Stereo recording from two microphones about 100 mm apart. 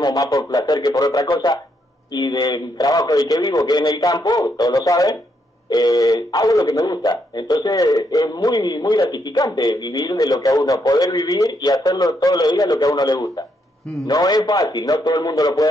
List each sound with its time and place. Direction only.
0.0 s speech: 40° left (ahead or behind)
1.2 s speech: 50° left (ahead or behind)